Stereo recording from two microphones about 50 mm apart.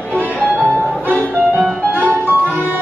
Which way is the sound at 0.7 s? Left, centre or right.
Left.